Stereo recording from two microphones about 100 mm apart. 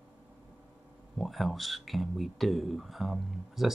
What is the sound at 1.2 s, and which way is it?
Speech, centre (ahead or behind).